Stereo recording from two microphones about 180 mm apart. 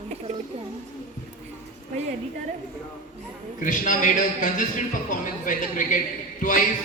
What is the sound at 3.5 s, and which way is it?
A man's voice, 45° left (ahead or behind).